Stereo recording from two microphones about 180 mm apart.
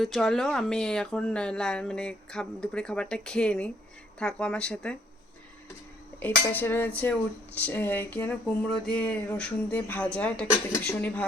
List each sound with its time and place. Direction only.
0.0 s speech: centre (ahead or behind)
6.1 s dishes: 10° left (ahead or behind)